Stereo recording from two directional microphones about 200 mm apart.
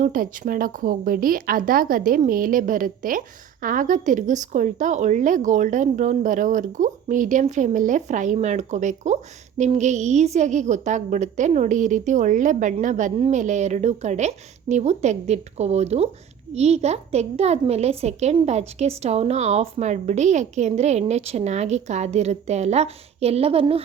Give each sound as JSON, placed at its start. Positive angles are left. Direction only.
{"t": 0.0, "sound": "speech", "side_deg": -40}